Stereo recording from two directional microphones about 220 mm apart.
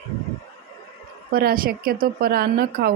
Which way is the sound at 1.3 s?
45° right (ahead or behind).